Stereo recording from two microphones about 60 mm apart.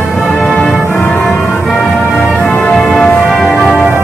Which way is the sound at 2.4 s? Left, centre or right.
Left.